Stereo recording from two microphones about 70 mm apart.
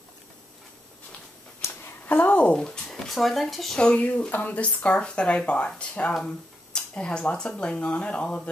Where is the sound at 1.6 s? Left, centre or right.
Left; by 3.8 s centre.